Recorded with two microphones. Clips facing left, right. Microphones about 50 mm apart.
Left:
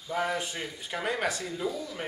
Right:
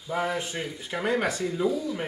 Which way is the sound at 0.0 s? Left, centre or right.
Centre.